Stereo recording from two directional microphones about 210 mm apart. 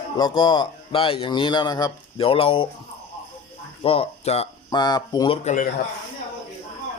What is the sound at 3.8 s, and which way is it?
Speech, 25° left (ahead or behind).